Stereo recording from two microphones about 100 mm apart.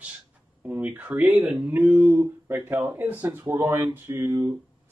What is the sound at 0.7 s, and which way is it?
Speech, 15° right (ahead or behind).